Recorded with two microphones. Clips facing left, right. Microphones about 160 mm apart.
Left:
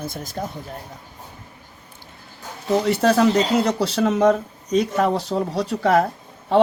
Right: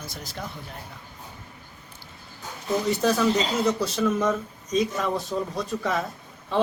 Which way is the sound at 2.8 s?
70° left (ahead or behind).